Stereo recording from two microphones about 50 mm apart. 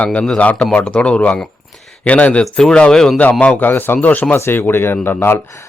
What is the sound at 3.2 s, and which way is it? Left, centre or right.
Speech, left.